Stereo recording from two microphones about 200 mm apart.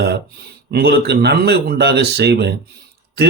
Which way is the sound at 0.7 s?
50° right (ahead or behind).